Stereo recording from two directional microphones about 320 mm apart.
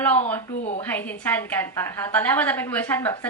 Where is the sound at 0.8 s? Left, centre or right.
Centre.